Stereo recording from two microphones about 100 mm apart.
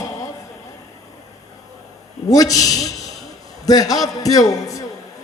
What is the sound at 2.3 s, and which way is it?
A man's voice, 35° left (ahead or behind).